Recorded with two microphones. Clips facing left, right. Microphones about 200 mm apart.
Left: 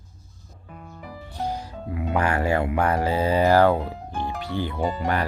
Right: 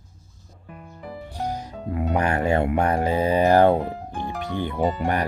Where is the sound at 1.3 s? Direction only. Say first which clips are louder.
Even; 15° right (ahead or behind).